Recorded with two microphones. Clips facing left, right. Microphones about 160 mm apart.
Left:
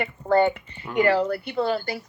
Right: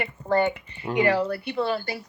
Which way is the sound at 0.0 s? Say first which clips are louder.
Left 3 dB; 35° left (ahead or behind).